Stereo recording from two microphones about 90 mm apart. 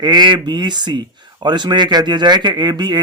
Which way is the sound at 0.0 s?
50° right (ahead or behind).